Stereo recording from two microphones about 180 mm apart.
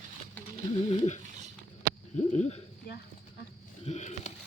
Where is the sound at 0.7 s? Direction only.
40° left (ahead or behind).